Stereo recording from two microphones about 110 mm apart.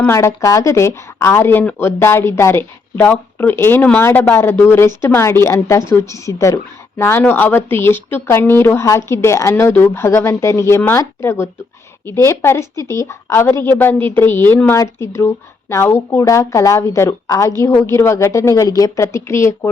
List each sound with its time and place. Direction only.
0.1 s a woman's voice: 25° left (ahead or behind)